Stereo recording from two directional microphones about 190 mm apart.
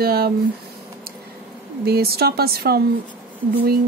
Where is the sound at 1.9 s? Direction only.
55° right (ahead or behind).